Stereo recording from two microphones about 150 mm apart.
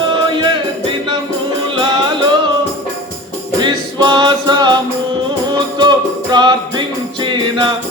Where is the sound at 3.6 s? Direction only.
30° right (ahead or behind).